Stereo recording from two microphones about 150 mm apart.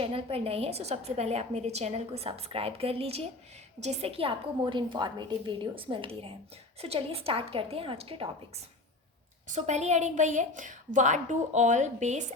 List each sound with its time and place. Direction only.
0.0 s a woman's voice: 40° right (ahead or behind)